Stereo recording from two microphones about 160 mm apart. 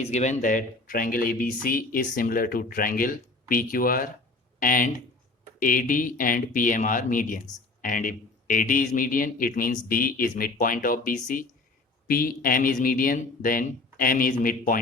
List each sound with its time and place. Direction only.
0.0 s speech: 45° left (ahead or behind)